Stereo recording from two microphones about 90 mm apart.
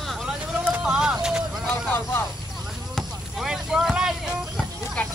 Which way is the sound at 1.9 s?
25° left (ahead or behind).